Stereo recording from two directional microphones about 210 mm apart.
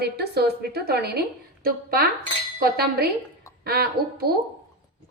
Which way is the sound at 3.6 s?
45° right (ahead or behind).